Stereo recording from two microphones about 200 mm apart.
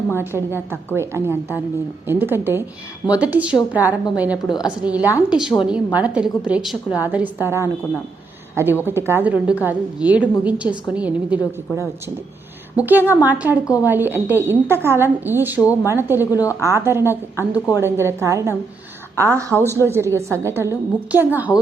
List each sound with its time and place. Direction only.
0.1 s a woman's voice: 10° right (ahead or behind)
16.3 s a woman's voice: 15° left (ahead or behind)
16.6 s a woman's voice: 15° right (ahead or behind)
19.6 s a woman's voice: 10° left (ahead or behind)
19.9 s a woman's voice: 15° right (ahead or behind)